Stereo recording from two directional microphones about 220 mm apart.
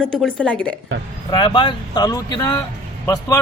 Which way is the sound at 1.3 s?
20° left (ahead or behind).